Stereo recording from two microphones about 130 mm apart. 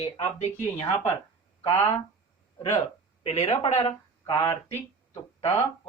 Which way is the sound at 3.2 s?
50° left (ahead or behind).